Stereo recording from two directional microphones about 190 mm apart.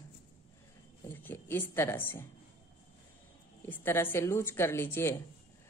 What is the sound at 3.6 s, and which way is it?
A woman's voice, 10° left (ahead or behind).